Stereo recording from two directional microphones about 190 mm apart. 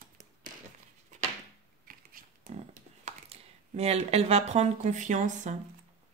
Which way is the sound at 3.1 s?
35° right (ahead or behind).